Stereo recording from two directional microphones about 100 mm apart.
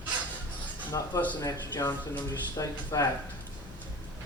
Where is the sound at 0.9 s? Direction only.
35° left (ahead or behind).